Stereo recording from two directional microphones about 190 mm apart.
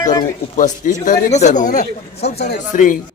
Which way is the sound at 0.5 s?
40° left (ahead or behind).